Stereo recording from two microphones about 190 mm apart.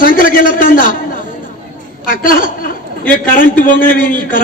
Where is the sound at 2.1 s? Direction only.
45° left (ahead or behind).